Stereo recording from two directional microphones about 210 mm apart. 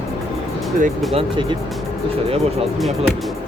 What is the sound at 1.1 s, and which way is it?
Speech, 25° right (ahead or behind).